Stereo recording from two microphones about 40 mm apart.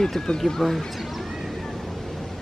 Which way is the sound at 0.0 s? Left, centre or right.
Centre.